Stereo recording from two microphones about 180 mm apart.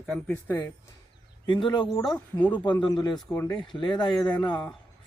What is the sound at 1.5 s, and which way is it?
Speech, 25° left (ahead or behind).